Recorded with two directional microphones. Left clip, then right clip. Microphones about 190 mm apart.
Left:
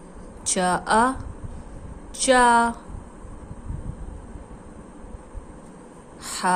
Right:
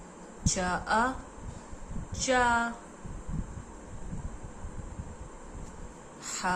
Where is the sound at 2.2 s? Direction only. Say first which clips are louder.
Left 9 dB; 45° left (ahead or behind).